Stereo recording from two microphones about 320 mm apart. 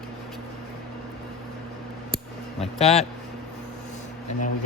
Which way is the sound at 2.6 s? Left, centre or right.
Centre.